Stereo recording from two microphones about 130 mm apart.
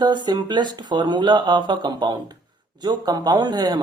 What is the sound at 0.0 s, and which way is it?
A woman's voice, 35° right (ahead or behind).